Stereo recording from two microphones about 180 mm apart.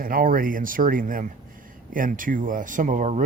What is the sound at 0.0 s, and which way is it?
Speech, 50° right (ahead or behind).